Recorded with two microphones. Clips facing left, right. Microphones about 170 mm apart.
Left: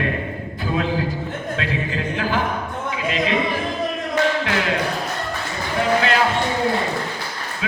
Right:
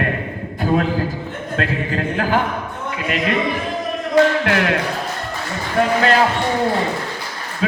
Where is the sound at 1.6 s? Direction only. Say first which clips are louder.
Right 5 dB; 50° right (ahead or behind).